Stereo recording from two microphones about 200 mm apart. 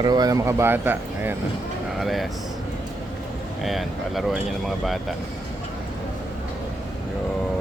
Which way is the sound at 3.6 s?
Centre (ahead or behind).